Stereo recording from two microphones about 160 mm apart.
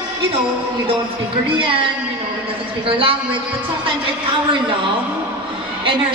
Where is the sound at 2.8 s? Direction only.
30° right (ahead or behind).